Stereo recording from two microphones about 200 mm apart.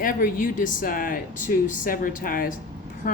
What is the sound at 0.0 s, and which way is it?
A woman's voice, 45° left (ahead or behind).